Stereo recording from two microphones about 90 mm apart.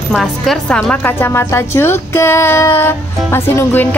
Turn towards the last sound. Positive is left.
turn(degrees=20)  # may be behind; listen again after turning